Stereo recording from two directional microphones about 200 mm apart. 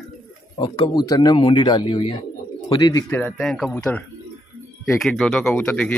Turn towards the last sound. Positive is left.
turn(degrees=5)  # may be behind; listen again after turning